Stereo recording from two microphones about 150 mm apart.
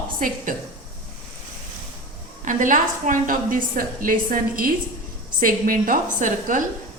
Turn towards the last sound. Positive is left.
turn(degrees=-60)  # may be behind; listen again after turning